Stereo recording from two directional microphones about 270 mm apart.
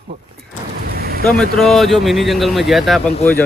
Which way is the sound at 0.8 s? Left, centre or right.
Right.